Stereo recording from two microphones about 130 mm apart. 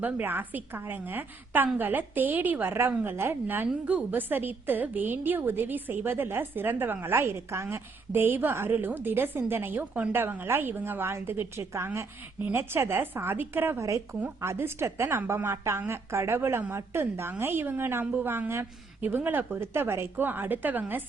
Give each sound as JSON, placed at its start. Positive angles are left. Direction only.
{"t": 0.0, "sound": "a woman's voice", "side_deg": -15}